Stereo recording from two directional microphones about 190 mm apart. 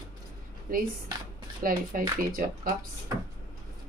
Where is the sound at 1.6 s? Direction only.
45° right (ahead or behind).